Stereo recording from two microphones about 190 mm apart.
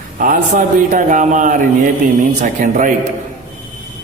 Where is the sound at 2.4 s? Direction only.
40° right (ahead or behind).